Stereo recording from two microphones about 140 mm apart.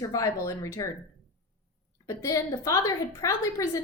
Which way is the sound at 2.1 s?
25° left (ahead or behind).